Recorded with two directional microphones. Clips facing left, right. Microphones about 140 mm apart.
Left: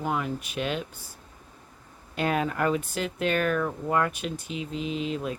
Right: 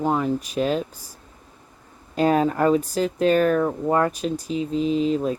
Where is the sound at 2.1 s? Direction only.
35° right (ahead or behind).